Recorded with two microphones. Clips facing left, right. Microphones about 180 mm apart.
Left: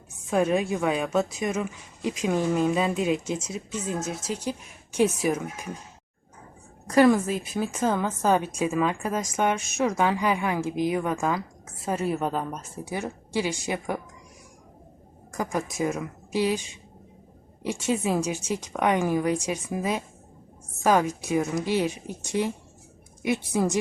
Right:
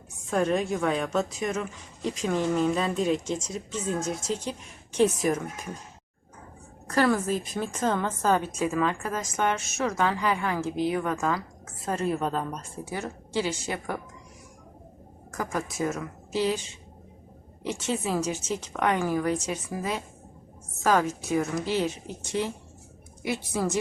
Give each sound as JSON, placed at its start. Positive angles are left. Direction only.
{"t": 0.3, "sound": "a woman's voice", "side_deg": 10}
{"t": 6.8, "sound": "a woman's voice", "side_deg": 15}
{"t": 15.3, "sound": "a woman's voice", "side_deg": 15}